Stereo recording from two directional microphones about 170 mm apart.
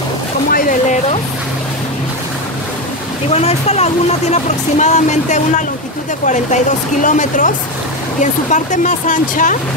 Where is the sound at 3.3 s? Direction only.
40° left (ahead or behind).